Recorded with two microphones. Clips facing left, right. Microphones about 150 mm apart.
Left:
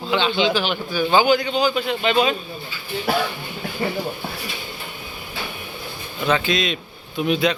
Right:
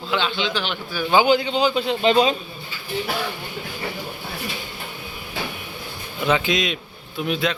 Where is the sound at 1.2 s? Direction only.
25° right (ahead or behind).